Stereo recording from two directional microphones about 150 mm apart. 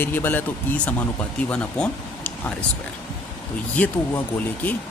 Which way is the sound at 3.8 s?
10° left (ahead or behind).